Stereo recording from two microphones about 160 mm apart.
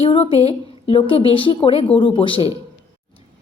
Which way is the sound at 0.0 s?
35° left (ahead or behind).